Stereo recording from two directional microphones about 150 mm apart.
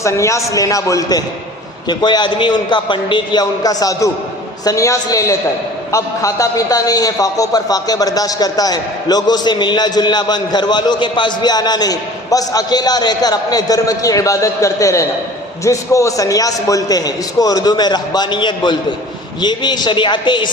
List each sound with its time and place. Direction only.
0.0 s a man's voice: 20° left (ahead or behind)